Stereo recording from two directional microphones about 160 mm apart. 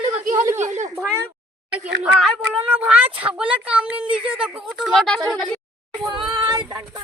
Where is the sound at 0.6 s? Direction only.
50° right (ahead or behind).